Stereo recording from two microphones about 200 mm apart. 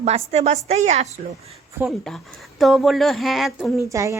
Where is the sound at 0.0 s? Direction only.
35° right (ahead or behind).